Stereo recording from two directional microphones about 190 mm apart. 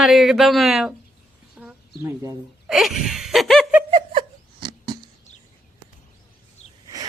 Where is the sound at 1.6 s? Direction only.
5° right (ahead or behind).